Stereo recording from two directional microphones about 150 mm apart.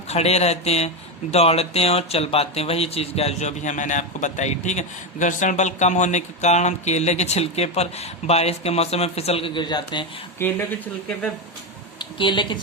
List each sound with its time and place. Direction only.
0.1 s speech: 45° left (ahead or behind)
10.4 s speech: 15° left (ahead or behind)
11.9 s speech: 30° left (ahead or behind)